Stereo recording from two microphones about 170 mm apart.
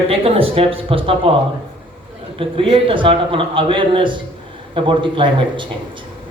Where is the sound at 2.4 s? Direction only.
30° right (ahead or behind).